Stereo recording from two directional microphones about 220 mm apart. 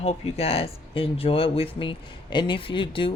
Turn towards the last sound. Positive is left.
turn(degrees=25)  # may be behind; listen again after turning